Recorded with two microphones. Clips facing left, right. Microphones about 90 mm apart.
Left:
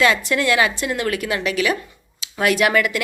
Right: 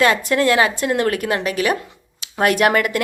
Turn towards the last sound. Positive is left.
turn(degrees=-45)  # may be behind; listen again after turning